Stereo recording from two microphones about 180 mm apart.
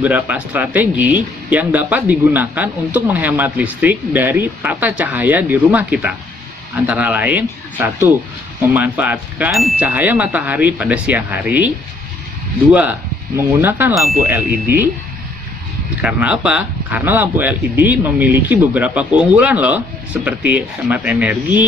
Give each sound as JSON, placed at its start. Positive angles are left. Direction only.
{"t": 0.0, "sound": "speech", "side_deg": -10}
{"t": 13.6, "sound": "speech", "side_deg": -10}
{"t": 16.0, "sound": "speech", "side_deg": -5}